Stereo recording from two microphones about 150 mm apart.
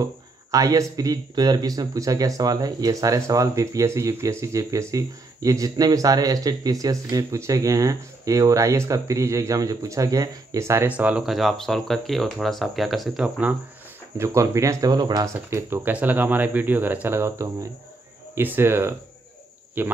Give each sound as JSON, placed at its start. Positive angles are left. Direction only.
{"t": 0.0, "sound": "speech", "side_deg": -25}
{"t": 14.1, "sound": "speech", "side_deg": -20}
{"t": 15.3, "sound": "speech", "side_deg": -15}